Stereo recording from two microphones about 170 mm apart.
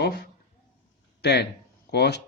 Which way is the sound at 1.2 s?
75° left (ahead or behind).